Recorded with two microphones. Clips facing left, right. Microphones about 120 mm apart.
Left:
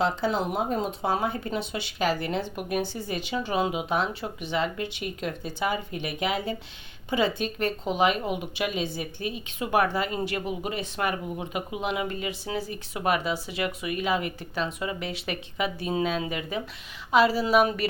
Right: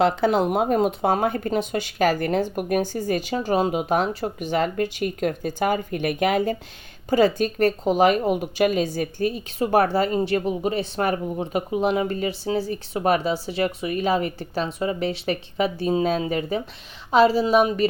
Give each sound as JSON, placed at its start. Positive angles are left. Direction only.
{"t": 0.0, "sound": "a woman's voice", "side_deg": -60}